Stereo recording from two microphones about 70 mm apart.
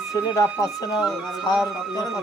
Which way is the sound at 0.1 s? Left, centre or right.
Left.